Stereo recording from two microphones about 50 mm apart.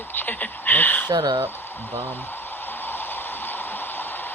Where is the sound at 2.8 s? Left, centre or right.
Left.